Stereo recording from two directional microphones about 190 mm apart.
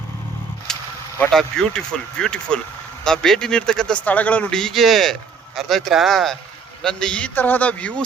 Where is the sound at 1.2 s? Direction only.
5° left (ahead or behind).